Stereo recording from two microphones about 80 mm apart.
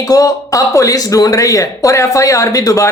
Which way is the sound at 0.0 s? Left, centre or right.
Left.